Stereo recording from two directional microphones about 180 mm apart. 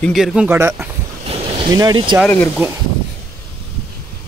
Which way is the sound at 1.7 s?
25° right (ahead or behind).